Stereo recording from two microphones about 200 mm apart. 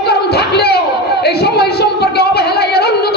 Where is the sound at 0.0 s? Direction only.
55° left (ahead or behind).